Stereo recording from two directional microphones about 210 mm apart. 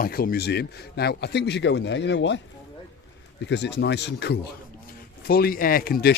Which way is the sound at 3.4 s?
55° left (ahead or behind).